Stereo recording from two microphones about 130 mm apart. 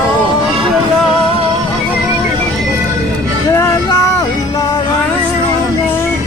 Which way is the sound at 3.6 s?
25° left (ahead or behind).